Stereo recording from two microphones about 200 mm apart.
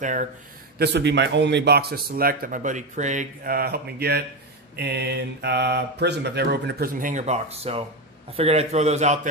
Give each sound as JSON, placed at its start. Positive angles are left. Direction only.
{"t": 0.0, "sound": "a man's voice", "side_deg": -40}
{"t": 0.7, "sound": "a man's voice", "side_deg": -55}